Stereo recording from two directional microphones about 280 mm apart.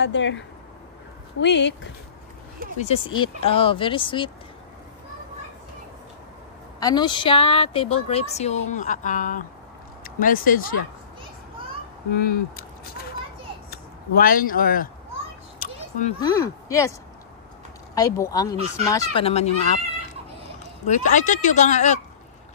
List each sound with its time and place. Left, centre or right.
0.0 s speech: left
2.8 s speech: centre
6.8 s speech: centre; by 10.7 s left
12.5 s a sound: left
13.7 s speech: left
15.6 s a sound: left
16.2 s speech: centre
17.9 s speech: centre